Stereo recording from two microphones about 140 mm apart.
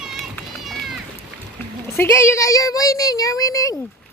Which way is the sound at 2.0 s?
20° left (ahead or behind).